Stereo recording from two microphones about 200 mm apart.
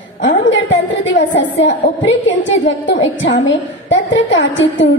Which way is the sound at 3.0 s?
65° left (ahead or behind).